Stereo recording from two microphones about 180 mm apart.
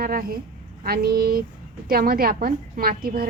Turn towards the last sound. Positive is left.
turn(degrees=-55)  # may be behind; listen again after turning